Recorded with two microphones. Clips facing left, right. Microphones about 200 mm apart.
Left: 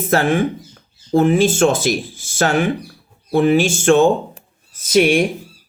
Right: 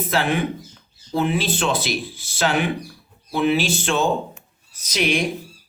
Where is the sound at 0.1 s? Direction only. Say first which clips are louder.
Left 7 dB; 45° left (ahead or behind).